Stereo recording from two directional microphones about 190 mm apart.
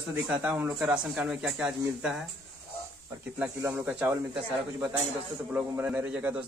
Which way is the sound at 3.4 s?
5° right (ahead or behind).